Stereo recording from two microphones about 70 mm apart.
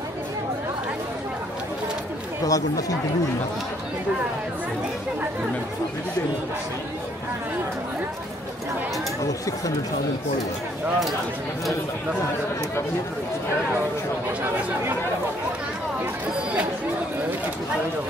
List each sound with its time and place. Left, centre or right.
2.4 s speech: left